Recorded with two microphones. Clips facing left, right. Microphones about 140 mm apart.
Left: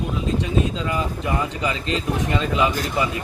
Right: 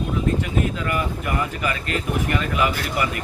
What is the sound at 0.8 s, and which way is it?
Speech, 20° left (ahead or behind).